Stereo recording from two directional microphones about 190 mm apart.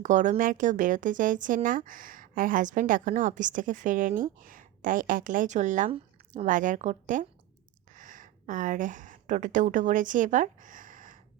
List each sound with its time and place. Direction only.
0.0 s a woman's voice: 40° right (ahead or behind)